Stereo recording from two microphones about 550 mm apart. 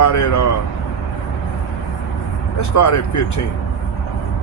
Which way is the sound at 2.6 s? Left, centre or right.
Left.